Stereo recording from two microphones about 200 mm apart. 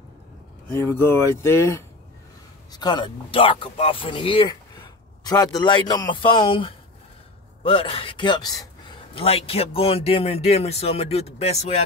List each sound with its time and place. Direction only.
0.8 s speech: 10° left (ahead or behind)
8.8 s a sound: 30° left (ahead or behind)
9.8 s speech: 30° left (ahead or behind)